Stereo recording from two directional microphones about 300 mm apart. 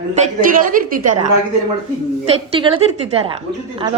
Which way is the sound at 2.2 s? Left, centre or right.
Centre.